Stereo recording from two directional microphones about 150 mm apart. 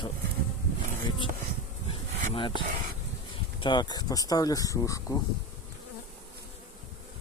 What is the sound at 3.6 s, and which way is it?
Speech, 30° left (ahead or behind).